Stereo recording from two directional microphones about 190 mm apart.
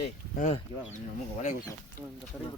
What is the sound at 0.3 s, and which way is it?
Speech, 35° left (ahead or behind).